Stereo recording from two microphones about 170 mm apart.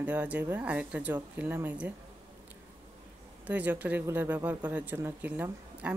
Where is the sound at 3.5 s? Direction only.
10° right (ahead or behind).